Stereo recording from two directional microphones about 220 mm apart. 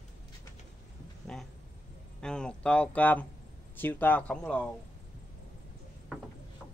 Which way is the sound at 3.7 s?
10° left (ahead or behind).